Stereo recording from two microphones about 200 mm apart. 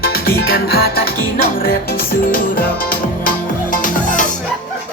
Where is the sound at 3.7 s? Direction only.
40° left (ahead or behind).